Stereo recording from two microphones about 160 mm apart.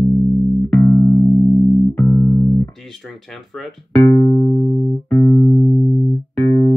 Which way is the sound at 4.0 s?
20° left (ahead or behind).